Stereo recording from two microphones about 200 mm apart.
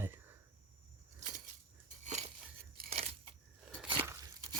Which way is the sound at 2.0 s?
35° right (ahead or behind).